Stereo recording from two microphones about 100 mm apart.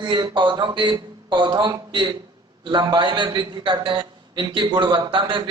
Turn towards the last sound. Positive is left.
turn(degrees=-55)  # may be behind; listen again after turning